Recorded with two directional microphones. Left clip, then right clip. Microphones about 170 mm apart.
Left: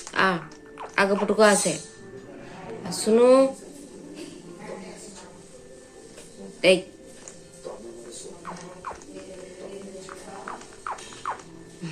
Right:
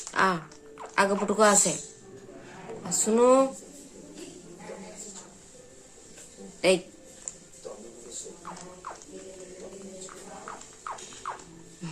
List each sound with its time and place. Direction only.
0.1 s speech: 15° right (ahead or behind)
2.9 s speech: 20° right (ahead or behind)
6.6 s speech: 15° right (ahead or behind)
10.9 s music: centre (ahead or behind)